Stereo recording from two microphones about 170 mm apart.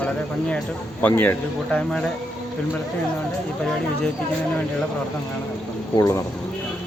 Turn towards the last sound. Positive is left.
turn(degrees=20)  # may be behind; listen again after turning